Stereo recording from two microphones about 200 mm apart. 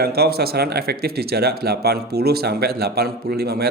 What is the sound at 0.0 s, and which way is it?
Speech, 50° right (ahead or behind).